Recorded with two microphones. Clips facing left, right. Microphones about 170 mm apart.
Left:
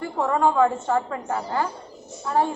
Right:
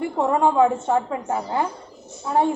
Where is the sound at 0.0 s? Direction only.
20° right (ahead or behind).